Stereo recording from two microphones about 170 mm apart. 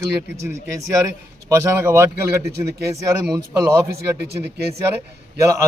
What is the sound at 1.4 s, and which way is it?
A man's voice, 15° right (ahead or behind).